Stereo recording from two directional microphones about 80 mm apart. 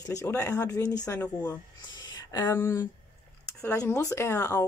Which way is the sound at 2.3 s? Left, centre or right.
Left.